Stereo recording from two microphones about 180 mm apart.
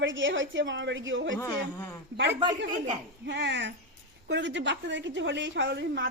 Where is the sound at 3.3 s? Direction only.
75° right (ahead or behind).